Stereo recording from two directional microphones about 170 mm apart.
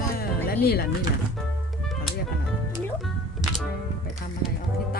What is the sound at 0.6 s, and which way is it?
Speech, 65° left (ahead or behind).